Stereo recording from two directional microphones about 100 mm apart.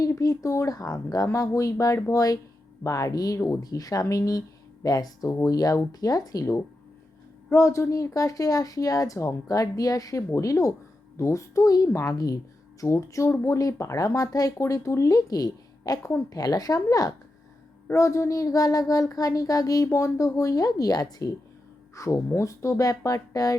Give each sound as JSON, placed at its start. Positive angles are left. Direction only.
{"t": 0.0, "sound": "speech", "side_deg": 35}
{"t": 21.9, "sound": "speech", "side_deg": 30}